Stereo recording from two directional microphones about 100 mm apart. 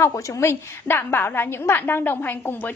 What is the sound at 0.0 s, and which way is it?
A woman's voice, 30° left (ahead or behind).